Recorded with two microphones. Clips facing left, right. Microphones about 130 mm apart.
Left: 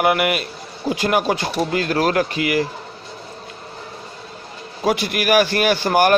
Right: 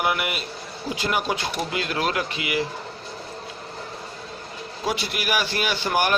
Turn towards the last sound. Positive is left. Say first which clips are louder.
# left 7 dB
turn(degrees=50)  # may be behind; listen again after turning